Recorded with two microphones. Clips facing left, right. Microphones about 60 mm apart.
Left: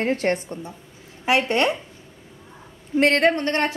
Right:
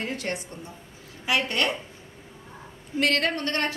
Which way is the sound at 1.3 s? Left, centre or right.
Left.